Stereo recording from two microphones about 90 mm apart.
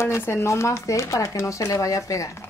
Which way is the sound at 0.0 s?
30° left (ahead or behind).